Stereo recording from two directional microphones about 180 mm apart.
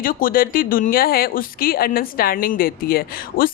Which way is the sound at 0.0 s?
50° left (ahead or behind).